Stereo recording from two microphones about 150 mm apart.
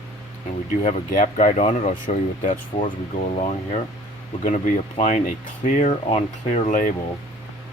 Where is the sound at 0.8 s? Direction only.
60° left (ahead or behind).